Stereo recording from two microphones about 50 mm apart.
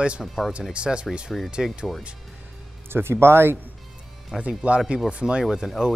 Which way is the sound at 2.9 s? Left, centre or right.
Right.